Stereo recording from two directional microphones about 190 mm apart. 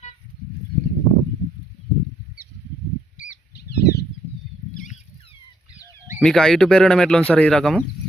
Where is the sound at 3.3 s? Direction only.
55° left (ahead or behind).